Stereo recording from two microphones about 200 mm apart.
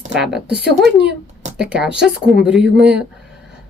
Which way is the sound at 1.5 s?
5° right (ahead or behind).